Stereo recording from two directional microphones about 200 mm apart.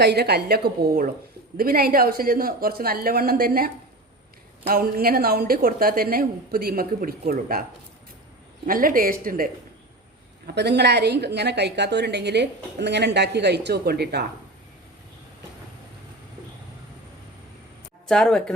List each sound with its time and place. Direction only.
0.0 s speech: 55° right (ahead or behind)
8.6 s speech: 45° right (ahead or behind)
10.4 s a woman's voice: 55° right (ahead or behind)
18.1 s speech: 5° left (ahead or behind)